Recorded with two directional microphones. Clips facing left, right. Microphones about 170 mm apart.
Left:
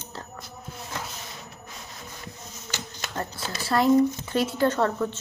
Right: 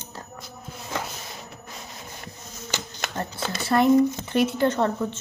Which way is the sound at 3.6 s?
20° right (ahead or behind).